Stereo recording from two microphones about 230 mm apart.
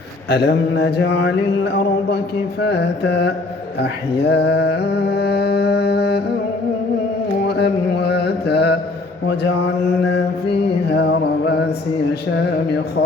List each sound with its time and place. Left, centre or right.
0.3 s mantra: left
3.8 s a sound: left
7.4 s mantra: left
10.8 s mantra: left